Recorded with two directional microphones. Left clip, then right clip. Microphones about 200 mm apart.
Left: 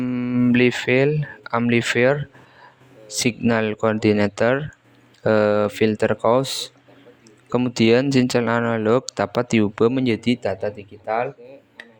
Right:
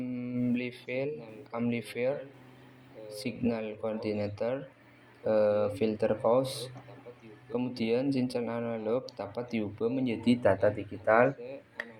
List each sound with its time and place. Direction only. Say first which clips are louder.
0.0 s speech: left 13 dB; 50° left (ahead or behind)
3.2 s speech: left 14 dB; 50° left (ahead or behind)
10.8 s speech: left 1 dB; 35° left (ahead or behind)
11.3 s a sound: even; centre (ahead or behind)